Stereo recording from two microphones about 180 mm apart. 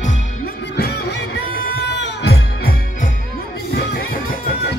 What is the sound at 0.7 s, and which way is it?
Music, 65° left (ahead or behind).